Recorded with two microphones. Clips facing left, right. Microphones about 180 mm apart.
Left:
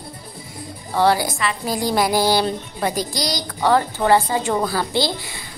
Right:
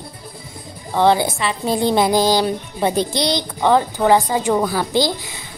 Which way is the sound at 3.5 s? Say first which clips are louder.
Right 1 dB; 15° right (ahead or behind).